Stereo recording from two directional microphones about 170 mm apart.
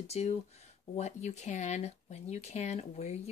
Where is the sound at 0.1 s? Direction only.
40° left (ahead or behind).